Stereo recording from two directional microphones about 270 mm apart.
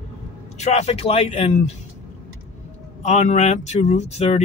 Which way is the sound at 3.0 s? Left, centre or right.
Left.